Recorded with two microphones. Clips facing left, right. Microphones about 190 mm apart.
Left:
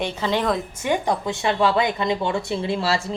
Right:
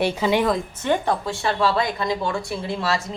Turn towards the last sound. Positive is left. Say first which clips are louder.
# left 2 dB
turn(degrees=30)  # may be behind; listen again after turning